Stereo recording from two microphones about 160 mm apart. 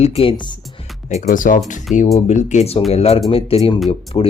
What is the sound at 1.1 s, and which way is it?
Speech, 55° left (ahead or behind).